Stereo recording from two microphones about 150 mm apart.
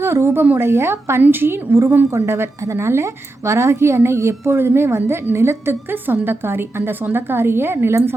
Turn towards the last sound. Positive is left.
turn(degrees=-15)  # may be behind; listen again after turning